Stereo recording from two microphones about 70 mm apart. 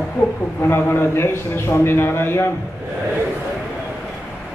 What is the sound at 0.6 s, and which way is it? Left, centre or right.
A man's voice, left.